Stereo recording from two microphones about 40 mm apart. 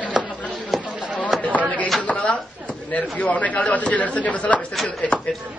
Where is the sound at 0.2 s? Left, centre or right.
Centre.